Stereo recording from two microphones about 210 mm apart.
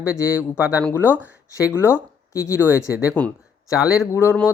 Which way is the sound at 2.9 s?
5° right (ahead or behind).